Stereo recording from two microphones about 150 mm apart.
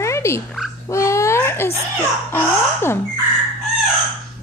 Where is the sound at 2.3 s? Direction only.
15° left (ahead or behind).